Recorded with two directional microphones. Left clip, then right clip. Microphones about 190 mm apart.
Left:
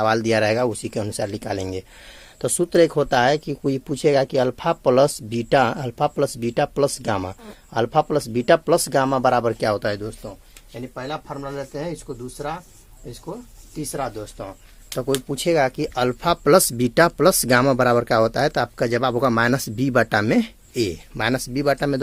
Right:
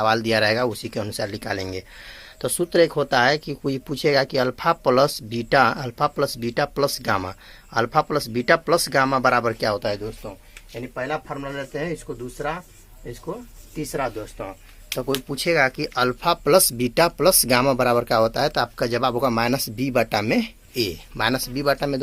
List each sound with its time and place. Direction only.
0.0 s speech: 45° left (ahead or behind)
11.4 s speech: 65° left (ahead or behind)
13.9 s speech: 90° left
15.3 s speech: 40° left (ahead or behind)